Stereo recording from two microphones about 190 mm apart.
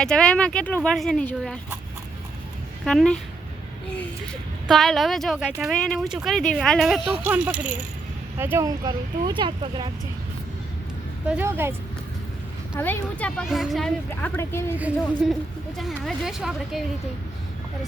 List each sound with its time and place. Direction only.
0.0 s speech: 5° left (ahead or behind)
2.8 s speech: 5° left (ahead or behind)
4.7 s speech: centre (ahead or behind); by 9.9 s 25° right (ahead or behind)
11.3 s speech: 10° right (ahead or behind)
12.7 s a woman's voice: 10° left (ahead or behind)
14.8 s speech: 5° right (ahead or behind)